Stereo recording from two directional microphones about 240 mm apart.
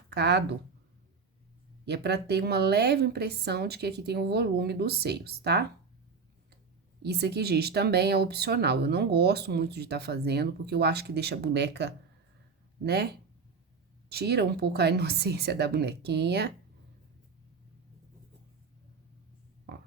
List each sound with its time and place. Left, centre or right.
0.1 s speech: right
1.8 s speech: right
7.0 s speech: right
19.7 s a sound: right